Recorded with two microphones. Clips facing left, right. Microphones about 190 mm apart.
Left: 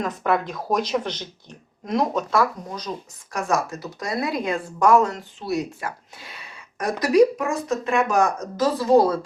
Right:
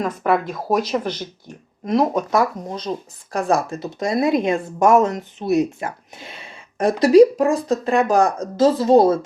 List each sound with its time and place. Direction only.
0.0 s speech: 5° right (ahead or behind)
2.1 s speech: 20° right (ahead or behind)